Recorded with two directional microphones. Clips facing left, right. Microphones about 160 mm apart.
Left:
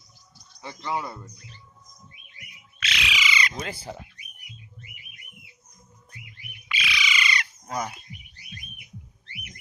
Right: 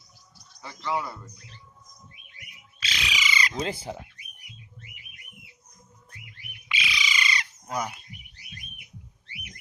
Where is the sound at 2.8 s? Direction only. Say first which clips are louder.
Left 2 dB; 35° right (ahead or behind).